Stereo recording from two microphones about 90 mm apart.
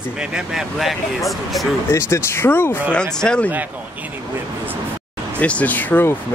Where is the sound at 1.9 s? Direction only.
30° left (ahead or behind).